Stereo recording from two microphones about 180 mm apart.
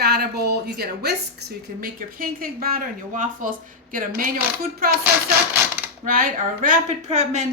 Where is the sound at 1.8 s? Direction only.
50° right (ahead or behind).